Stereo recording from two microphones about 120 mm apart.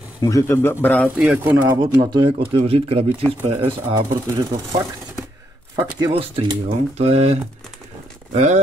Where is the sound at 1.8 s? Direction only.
35° right (ahead or behind).